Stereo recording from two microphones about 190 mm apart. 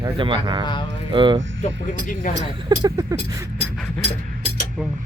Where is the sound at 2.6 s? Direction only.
20° right (ahead or behind).